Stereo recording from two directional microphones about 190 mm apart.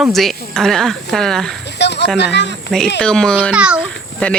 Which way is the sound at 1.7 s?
65° left (ahead or behind).